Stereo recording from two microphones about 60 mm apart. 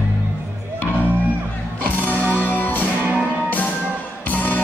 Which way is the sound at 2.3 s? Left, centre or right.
Left.